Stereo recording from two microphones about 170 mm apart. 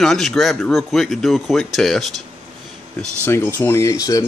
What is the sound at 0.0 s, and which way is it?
Speech, centre (ahead or behind).